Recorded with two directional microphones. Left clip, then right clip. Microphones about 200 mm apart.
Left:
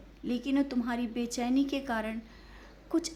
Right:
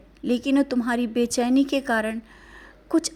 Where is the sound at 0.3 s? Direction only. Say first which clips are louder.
Right 9 dB; 40° right (ahead or behind).